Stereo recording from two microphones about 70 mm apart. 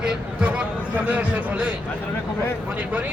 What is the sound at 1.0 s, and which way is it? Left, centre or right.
Speech, right.